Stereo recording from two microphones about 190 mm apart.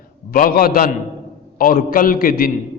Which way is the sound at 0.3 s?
50° left (ahead or behind).